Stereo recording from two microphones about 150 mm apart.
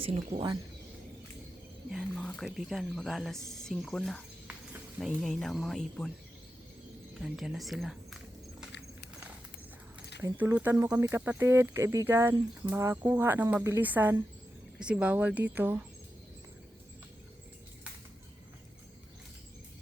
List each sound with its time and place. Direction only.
0.0 s speech: 35° right (ahead or behind)
1.9 s speech: centre (ahead or behind)
7.1 s speech: centre (ahead or behind)
10.2 s speech: 15° right (ahead or behind)